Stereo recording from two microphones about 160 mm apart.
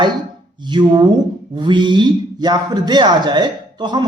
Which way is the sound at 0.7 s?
30° right (ahead or behind).